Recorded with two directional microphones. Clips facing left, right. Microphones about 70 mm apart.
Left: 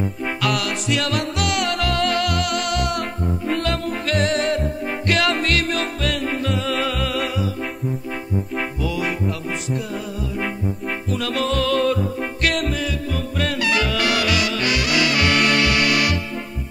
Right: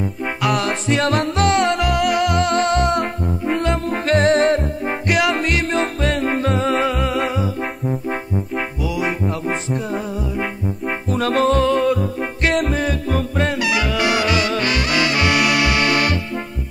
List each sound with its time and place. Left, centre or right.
0.2 s music: centre
0.6 s music: right
5.0 s music: centre
8.5 s music: centre
11.1 s music: right
11.7 s music: centre
12.4 s music: right
13.5 s music: centre
15.3 s music: centre; by 16.2 s right